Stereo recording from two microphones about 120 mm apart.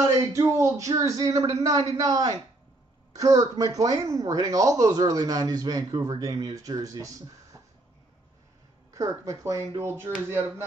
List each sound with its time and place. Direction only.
0.3 s a woman's voice: 25° right (ahead or behind)
8.9 s a woman's voice: 25° right (ahead or behind)